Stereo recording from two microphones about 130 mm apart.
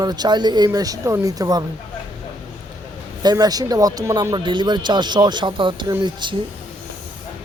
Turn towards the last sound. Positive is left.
turn(degrees=-35)  # may be behind; listen again after turning